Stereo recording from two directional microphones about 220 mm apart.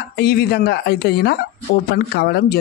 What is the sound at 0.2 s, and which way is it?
Speech, 45° left (ahead or behind).